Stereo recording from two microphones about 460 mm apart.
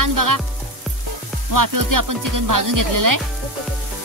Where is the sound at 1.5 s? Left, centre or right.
Right.